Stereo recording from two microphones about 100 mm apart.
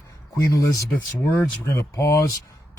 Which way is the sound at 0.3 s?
35° left (ahead or behind).